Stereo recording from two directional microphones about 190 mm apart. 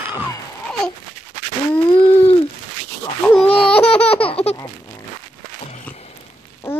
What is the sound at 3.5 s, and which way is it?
Baby laughter, 30° left (ahead or behind).